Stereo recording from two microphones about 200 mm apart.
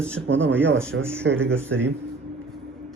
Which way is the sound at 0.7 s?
75° right (ahead or behind).